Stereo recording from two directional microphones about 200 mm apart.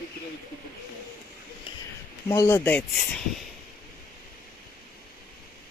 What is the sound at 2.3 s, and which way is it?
Speech, 15° left (ahead or behind).